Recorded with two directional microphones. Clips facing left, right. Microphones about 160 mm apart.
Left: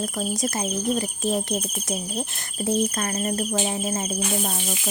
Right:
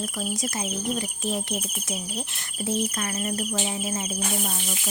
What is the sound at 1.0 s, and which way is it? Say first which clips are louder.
Speech: left 4 dB; 40° left (ahead or behind).